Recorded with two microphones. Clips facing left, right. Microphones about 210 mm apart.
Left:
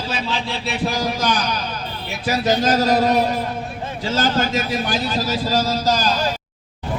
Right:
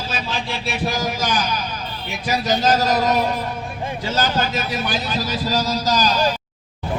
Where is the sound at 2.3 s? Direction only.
50° left (ahead or behind).